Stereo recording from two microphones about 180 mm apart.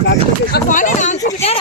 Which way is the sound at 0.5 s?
45° left (ahead or behind).